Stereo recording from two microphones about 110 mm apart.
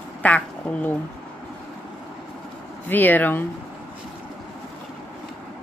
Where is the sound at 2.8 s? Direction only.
15° left (ahead or behind).